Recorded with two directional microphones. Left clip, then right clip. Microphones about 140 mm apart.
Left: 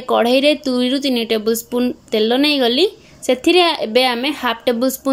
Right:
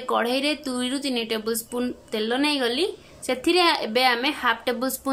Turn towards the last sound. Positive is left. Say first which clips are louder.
# left 9 dB
turn(degrees=25)  # may be behind; listen again after turning